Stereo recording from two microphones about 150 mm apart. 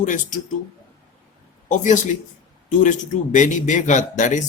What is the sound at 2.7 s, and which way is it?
Speech, 55° left (ahead or behind).